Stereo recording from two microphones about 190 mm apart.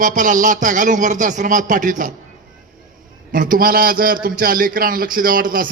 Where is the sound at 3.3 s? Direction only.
45° right (ahead or behind).